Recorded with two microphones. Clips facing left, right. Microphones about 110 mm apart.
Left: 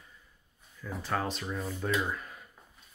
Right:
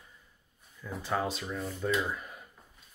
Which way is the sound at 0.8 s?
10° right (ahead or behind).